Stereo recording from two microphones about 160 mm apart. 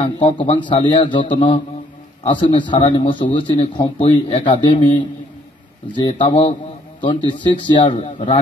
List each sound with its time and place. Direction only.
0.0 s a man's voice: 30° left (ahead or behind)